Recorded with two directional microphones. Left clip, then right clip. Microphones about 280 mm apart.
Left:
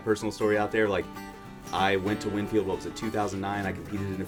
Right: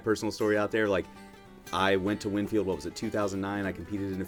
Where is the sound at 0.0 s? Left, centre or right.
Right.